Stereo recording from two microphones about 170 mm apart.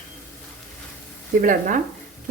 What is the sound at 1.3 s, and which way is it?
Speech, 55° right (ahead or behind).